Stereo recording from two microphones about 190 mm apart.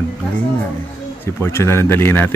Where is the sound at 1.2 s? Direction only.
15° left (ahead or behind).